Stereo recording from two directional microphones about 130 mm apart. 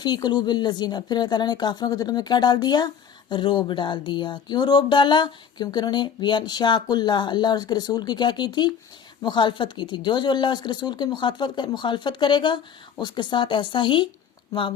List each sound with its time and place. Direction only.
0.0 s speech: 30° left (ahead or behind)